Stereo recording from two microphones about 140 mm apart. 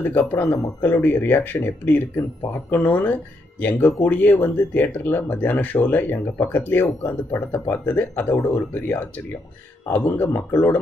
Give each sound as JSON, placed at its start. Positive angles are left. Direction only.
{"t": 0.0, "sound": "speech", "side_deg": 15}